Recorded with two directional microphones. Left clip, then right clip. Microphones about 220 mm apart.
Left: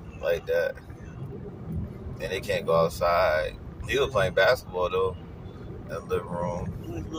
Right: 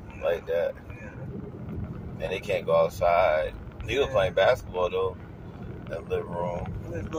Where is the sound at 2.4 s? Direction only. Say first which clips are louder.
Even; 15° left (ahead or behind).